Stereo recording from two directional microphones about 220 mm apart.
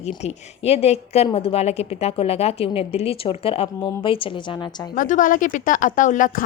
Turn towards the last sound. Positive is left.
turn(degrees=35)  # may be behind; listen again after turning